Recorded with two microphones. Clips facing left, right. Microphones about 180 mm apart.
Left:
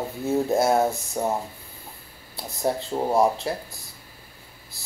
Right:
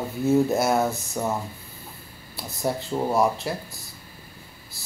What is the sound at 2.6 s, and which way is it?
Speech, 20° left (ahead or behind).